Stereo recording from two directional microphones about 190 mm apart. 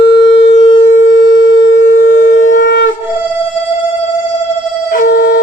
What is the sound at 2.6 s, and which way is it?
Shofar, 70° left (ahead or behind).